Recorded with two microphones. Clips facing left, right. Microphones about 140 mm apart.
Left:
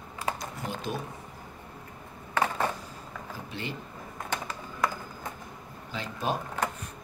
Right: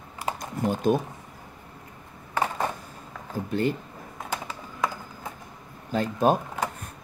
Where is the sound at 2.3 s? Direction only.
15° right (ahead or behind).